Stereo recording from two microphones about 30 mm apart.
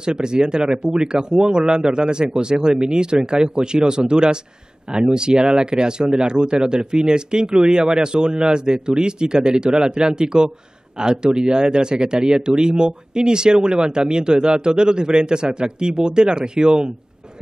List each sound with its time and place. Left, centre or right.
0.0 s speech: right